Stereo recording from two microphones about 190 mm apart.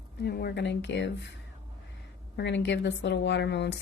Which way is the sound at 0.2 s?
60° left (ahead or behind).